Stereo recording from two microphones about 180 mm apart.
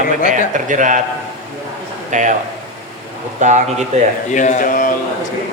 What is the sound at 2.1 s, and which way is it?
Speech, 45° right (ahead or behind).